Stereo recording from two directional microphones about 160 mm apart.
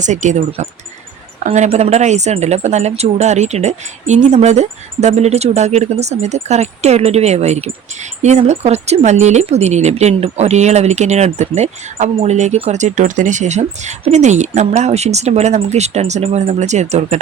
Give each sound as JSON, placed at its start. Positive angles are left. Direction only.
{"t": 0.0, "sound": "speech", "side_deg": -50}